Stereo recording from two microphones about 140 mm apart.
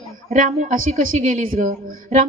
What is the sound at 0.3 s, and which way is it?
A woman's voice, 65° right (ahead or behind).